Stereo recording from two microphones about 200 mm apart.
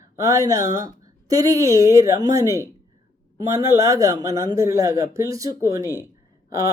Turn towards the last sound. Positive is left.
turn(degrees=-15)  # may be behind; listen again after turning